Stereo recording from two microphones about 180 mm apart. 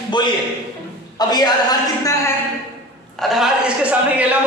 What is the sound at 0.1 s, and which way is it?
A man's voice, 25° left (ahead or behind).